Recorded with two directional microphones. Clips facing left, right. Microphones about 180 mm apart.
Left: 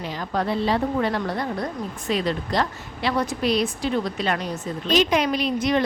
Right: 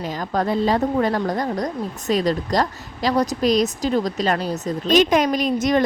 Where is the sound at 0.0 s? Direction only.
45° right (ahead or behind).